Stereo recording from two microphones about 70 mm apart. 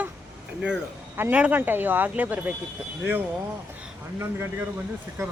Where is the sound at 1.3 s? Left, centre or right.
Centre.